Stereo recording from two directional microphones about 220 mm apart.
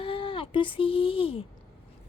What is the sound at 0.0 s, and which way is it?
Speech, 25° left (ahead or behind).